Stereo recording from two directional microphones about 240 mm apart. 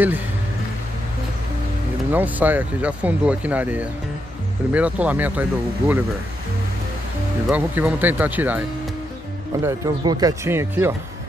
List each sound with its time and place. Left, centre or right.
2.1 s speech: centre
7.4 s speech: centre